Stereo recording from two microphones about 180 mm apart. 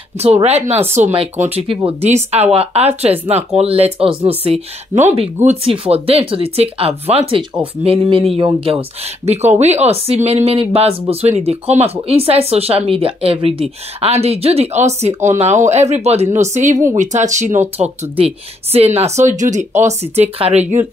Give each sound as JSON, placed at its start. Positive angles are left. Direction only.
{"t": 0.2, "sound": "speech", "side_deg": -35}